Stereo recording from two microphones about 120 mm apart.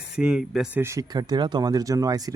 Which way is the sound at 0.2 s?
5° right (ahead or behind).